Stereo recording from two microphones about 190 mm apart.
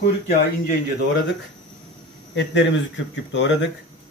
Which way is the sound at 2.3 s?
70° left (ahead or behind).